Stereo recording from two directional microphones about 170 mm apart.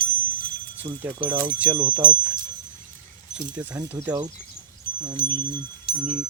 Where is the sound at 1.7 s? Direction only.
25° right (ahead or behind).